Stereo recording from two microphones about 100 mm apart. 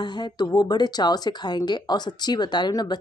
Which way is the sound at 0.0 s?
45° left (ahead or behind).